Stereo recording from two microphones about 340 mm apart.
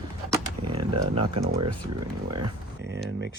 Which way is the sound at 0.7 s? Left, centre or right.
Centre.